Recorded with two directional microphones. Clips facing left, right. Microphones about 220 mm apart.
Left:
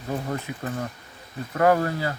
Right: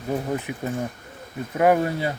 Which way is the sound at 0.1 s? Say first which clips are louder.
Right 3 dB; 15° right (ahead or behind).